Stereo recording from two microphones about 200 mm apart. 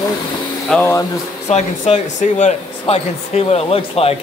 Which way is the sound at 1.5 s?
35° left (ahead or behind).